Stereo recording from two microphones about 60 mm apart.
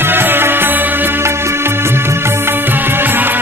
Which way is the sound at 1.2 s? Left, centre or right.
Right.